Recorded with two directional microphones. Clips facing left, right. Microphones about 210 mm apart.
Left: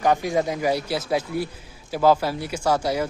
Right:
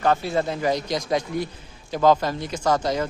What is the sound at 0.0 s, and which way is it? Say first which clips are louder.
A man's voice: left 1 dB; 15° left (ahead or behind).